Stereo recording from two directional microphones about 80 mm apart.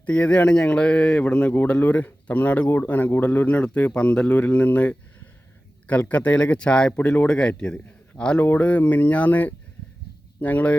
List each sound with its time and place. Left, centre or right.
0.0 s speech: centre